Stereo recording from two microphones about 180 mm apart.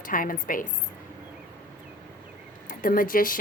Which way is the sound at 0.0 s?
50° left (ahead or behind).